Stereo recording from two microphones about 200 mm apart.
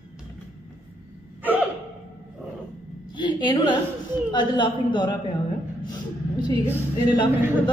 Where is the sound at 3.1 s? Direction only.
25° left (ahead or behind).